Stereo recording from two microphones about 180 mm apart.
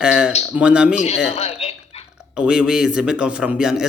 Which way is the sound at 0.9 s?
35° left (ahead or behind).